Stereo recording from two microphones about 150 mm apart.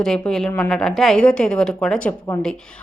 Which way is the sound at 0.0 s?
Centre (ahead or behind).